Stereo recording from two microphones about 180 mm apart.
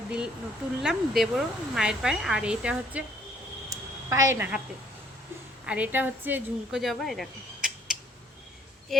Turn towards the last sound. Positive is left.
turn(degrees=-5)  # may be behind; listen again after turning